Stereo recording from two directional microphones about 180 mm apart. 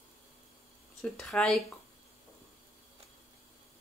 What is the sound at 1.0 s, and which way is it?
Speech, centre (ahead or behind).